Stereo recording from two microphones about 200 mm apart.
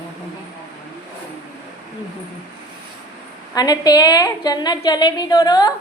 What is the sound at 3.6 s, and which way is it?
A woman's voice, 20° left (ahead or behind).